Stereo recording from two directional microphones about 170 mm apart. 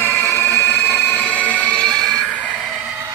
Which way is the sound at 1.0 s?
10° left (ahead or behind).